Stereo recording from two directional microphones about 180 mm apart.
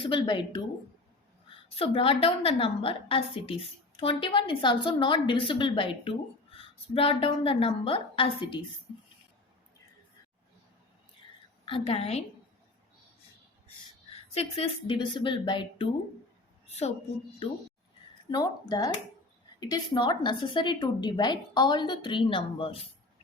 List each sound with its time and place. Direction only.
0.0 s a woman's voice: 25° left (ahead or behind)
1.7 s a woman's voice: 30° left (ahead or behind)
11.6 s a woman's voice: 30° left (ahead or behind)
14.3 s a woman's voice: 30° left (ahead or behind)
16.6 s a woman's voice: 40° left (ahead or behind)
18.3 s a woman's voice: 20° left (ahead or behind)